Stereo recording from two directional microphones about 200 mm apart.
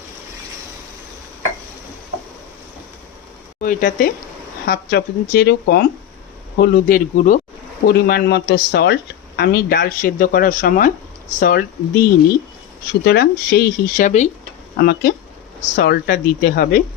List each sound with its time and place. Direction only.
3.6 s speech: 45° left (ahead or behind)
13.1 s speech: 55° left (ahead or behind); by 14.3 s 40° left (ahead or behind)
14.8 s speech: 50° left (ahead or behind)